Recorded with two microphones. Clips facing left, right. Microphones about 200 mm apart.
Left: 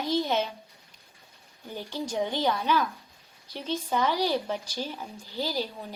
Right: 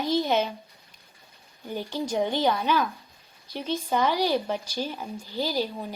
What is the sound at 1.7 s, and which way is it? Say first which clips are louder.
Speech: right 4 dB; 15° right (ahead or behind).